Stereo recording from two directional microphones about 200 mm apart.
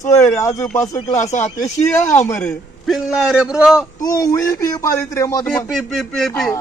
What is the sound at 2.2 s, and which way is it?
Speech, 10° left (ahead or behind).